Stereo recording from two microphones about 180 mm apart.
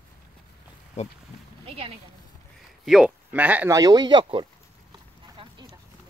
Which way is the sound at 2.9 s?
5° right (ahead or behind).